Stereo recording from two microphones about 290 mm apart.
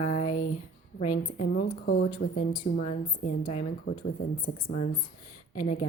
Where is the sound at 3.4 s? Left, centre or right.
Left.